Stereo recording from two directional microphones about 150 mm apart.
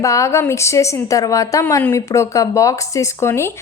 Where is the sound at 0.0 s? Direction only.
20° left (ahead or behind).